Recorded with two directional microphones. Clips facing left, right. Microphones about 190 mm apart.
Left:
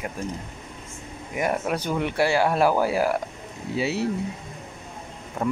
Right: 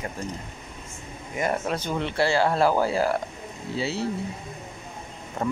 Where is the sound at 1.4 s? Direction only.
10° left (ahead or behind).